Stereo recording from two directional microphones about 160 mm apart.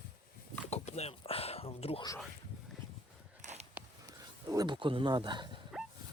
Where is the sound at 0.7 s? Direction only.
40° left (ahead or behind).